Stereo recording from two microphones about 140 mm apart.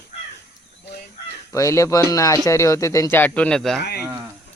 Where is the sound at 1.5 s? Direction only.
20° left (ahead or behind); by 3.8 s 5° left (ahead or behind).